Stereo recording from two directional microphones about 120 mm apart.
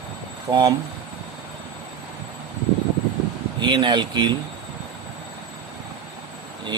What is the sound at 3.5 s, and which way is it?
Speech, 40° right (ahead or behind).